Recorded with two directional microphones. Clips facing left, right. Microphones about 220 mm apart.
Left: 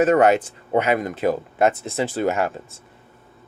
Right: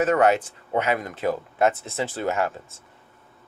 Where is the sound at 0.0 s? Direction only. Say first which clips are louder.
Left 4 dB; 15° left (ahead or behind).